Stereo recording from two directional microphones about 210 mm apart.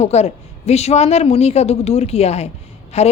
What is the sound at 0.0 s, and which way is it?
A woman's voice, 30° left (ahead or behind).